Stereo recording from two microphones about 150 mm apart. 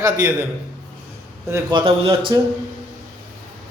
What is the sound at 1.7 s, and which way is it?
Speech, 35° right (ahead or behind).